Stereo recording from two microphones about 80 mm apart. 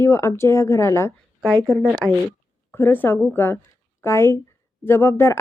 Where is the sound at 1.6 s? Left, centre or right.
Centre.